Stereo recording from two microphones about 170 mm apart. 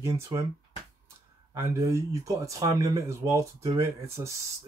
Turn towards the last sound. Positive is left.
turn(degrees=-15)  # may be behind; listen again after turning